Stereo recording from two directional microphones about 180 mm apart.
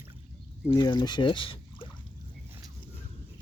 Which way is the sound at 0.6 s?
25° left (ahead or behind).